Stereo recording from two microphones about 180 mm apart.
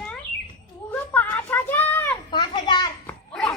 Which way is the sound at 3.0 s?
5° left (ahead or behind).